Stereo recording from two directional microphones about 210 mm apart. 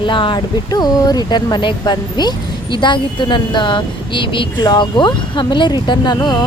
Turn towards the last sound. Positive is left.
turn(degrees=20)  # may be behind; listen again after turning